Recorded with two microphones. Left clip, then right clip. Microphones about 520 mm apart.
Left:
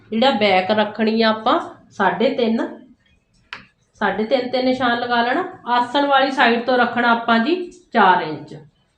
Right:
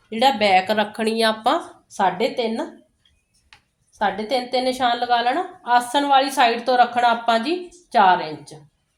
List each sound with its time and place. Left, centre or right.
0.1 s a woman's voice: right
3.9 s a woman's voice: right